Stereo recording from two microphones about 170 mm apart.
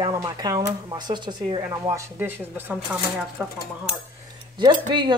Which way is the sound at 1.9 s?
15° right (ahead or behind).